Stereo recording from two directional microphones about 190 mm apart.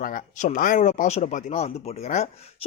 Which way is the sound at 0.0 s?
45° left (ahead or behind).